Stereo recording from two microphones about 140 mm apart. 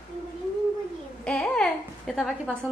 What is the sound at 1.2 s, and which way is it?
A woman's voice, 5° left (ahead or behind).